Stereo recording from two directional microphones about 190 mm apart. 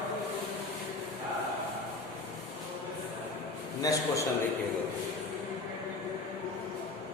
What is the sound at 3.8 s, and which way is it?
Speech, 15° left (ahead or behind).